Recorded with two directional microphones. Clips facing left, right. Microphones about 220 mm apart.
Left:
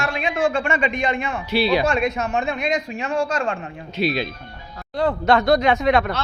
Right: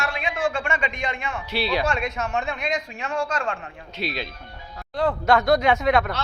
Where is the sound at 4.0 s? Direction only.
5° left (ahead or behind).